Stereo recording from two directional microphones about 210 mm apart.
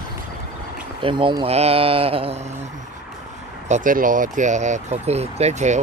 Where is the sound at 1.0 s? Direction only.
25° right (ahead or behind).